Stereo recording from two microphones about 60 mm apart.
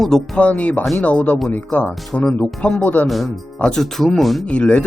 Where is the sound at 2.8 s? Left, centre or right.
Left.